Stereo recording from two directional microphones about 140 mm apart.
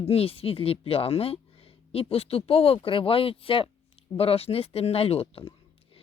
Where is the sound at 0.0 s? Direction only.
45° left (ahead or behind).